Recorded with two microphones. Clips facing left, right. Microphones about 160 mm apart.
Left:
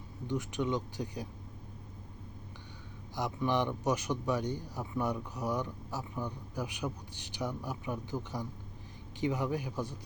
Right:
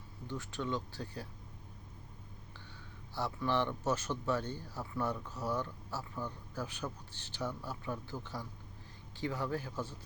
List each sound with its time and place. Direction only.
0.3 s speech: 15° left (ahead or behind)
3.2 s speech: 15° left (ahead or behind)